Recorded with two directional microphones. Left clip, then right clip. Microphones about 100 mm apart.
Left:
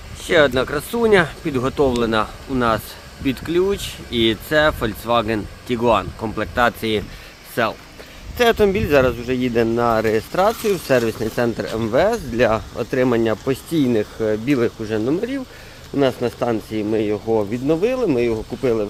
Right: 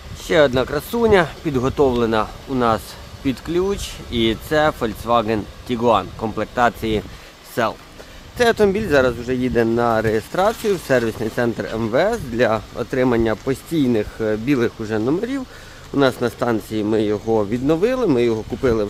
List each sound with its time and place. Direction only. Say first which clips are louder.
0.3 s speech: even; 20° right (ahead or behind)
9.9 s speech: left 1 dB; 15° right (ahead or behind); by 18.9 s 50° right (ahead or behind)